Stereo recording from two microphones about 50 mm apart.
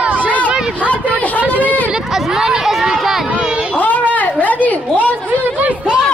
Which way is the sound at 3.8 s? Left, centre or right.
Left.